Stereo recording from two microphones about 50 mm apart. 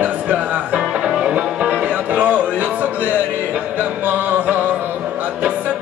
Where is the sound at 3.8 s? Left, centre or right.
Right.